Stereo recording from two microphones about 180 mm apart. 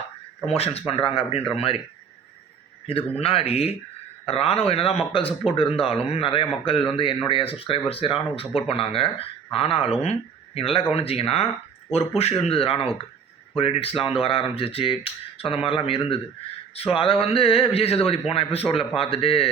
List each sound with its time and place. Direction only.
0.4 s speech: 35° left (ahead or behind)
2.8 s speech: 30° left (ahead or behind)